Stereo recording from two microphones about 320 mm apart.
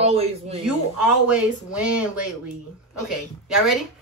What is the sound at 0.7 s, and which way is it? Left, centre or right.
Speech, centre.